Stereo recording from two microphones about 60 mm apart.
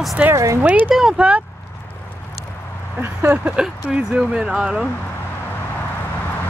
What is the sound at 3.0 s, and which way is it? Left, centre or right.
Speech, right.